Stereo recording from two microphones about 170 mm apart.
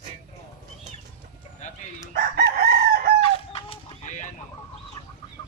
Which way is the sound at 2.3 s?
65° right (ahead or behind).